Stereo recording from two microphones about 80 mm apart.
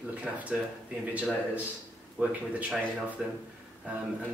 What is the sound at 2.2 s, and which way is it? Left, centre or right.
Speech, centre.